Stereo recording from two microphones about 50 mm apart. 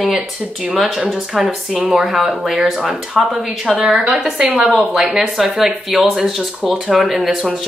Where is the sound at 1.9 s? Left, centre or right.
Centre.